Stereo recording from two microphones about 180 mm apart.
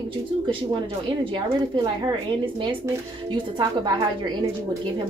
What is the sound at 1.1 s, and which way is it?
A woman's voice, 25° right (ahead or behind).